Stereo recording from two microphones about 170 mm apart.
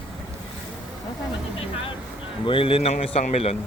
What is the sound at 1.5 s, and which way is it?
A man's voice, 35° left (ahead or behind).